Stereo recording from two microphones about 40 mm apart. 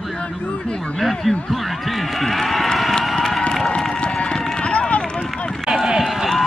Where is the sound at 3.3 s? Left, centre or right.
Centre.